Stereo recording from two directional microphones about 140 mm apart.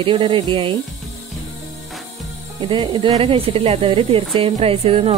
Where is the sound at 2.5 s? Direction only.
35° right (ahead or behind).